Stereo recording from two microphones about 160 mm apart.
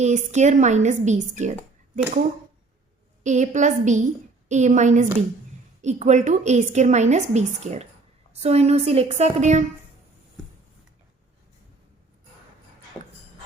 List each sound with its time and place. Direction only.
0.0 s a woman's voice: 45° right (ahead or behind)
3.2 s a woman's voice: 50° right (ahead or behind)